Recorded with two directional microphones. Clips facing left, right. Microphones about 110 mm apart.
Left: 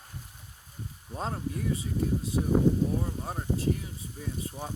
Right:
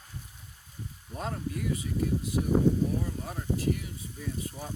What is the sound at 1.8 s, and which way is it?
Speech, 30° left (ahead or behind).